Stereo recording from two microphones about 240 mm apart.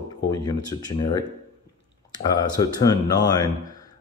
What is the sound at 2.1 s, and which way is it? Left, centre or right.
Speech, centre.